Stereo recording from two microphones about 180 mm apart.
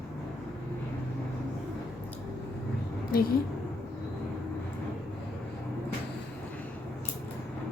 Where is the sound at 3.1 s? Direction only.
55° left (ahead or behind).